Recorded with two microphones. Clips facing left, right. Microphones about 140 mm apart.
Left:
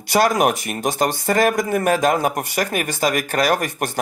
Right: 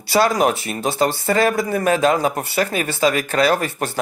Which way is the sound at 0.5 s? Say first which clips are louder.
Even; 15° left (ahead or behind).